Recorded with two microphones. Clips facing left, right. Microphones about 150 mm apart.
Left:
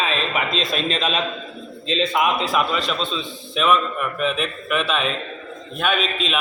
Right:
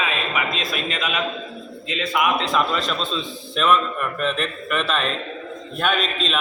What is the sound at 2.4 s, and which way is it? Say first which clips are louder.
A man's voice: even; 5° left (ahead or behind).